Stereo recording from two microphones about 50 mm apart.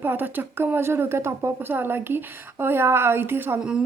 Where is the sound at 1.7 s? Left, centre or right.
Right.